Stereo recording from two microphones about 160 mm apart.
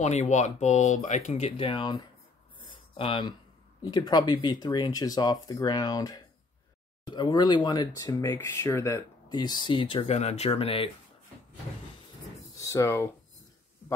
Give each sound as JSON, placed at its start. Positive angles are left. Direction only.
{"t": 0.0, "sound": "speech", "side_deg": 45}
{"t": 2.7, "sound": "a sound", "side_deg": 30}
{"t": 3.8, "sound": "speech", "side_deg": 25}
{"t": 12.5, "sound": "speech", "side_deg": 20}